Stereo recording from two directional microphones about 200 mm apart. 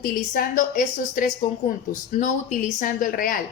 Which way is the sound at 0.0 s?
45° left (ahead or behind).